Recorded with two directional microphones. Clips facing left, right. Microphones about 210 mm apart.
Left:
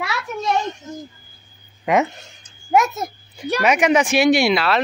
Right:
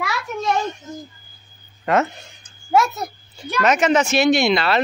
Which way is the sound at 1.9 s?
15° left (ahead or behind).